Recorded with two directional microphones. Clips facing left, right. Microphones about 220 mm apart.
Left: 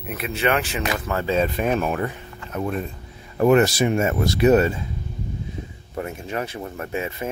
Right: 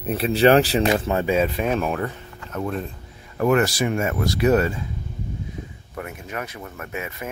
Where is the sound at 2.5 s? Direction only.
15° left (ahead or behind).